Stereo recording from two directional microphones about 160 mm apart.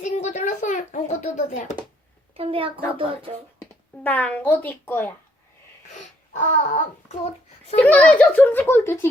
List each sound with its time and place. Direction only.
0.0 s a sound: 45° left (ahead or behind)
2.3 s a woman's voice: 35° right (ahead or behind)
4.0 s a child's voice: 10° left (ahead or behind)
5.9 s a child's voice: 50° left (ahead or behind)
7.8 s a child's voice: 10° left (ahead or behind)